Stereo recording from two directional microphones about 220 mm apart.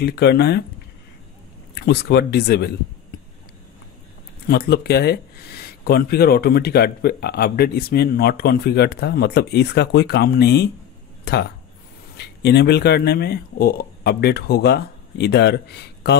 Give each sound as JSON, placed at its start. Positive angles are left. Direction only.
{"t": 0.0, "sound": "speech", "side_deg": 45}
{"t": 1.8, "sound": "speech", "side_deg": 45}
{"t": 4.5, "sound": "speech", "side_deg": 45}